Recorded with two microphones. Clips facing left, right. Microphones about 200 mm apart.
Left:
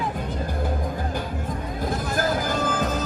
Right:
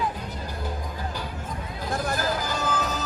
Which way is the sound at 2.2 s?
50° left (ahead or behind).